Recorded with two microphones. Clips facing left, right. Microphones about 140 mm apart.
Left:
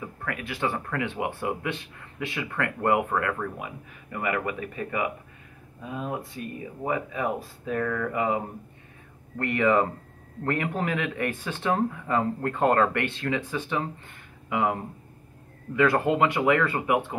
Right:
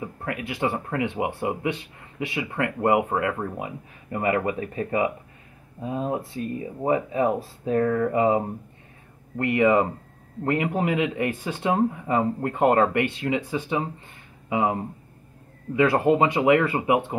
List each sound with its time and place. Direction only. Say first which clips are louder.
0.0 s speech: right 3 dB; 25° right (ahead or behind)
9.4 s speech: right 3 dB; 20° right (ahead or behind)